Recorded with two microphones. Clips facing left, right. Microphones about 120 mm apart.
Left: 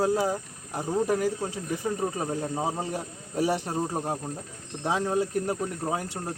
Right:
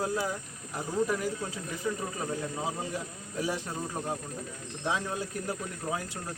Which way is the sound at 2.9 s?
70° left (ahead or behind).